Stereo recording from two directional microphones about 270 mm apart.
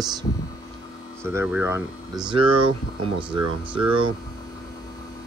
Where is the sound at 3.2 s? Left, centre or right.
Centre.